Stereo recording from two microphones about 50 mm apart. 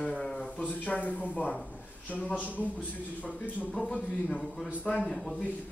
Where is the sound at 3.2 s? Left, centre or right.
Left.